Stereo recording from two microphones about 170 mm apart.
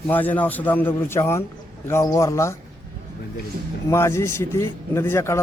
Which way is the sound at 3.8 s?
15° left (ahead or behind).